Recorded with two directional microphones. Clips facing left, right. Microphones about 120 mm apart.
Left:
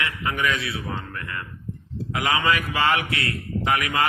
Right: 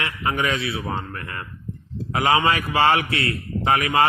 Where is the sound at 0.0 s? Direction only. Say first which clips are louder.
Right 2 dB; 30° right (ahead or behind).